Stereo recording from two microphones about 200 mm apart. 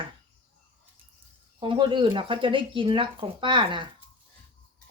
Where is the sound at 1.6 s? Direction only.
25° right (ahead or behind).